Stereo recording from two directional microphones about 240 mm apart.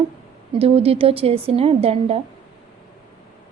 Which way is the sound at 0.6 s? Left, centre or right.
Right.